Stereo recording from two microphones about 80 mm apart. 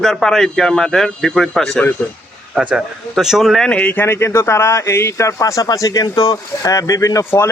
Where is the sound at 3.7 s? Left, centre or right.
Centre.